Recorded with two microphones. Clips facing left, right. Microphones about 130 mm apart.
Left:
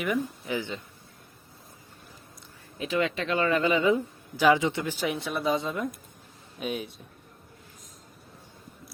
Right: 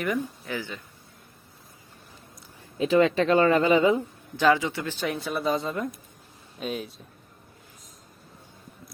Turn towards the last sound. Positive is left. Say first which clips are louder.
# even
turn(degrees=0)  # may be behind; listen again after turning